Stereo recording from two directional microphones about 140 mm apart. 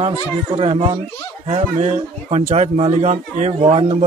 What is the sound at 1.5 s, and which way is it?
Speech, 50° right (ahead or behind).